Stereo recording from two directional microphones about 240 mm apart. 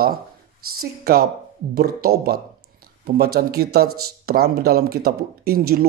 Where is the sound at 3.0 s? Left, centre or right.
Right.